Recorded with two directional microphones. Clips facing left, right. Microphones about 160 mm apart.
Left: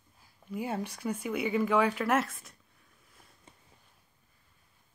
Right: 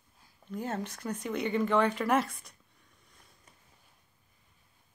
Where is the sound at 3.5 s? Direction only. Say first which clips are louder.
Left 8 dB; 25° left (ahead or behind).